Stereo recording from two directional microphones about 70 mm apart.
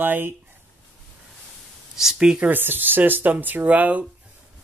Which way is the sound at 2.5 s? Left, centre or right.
Right.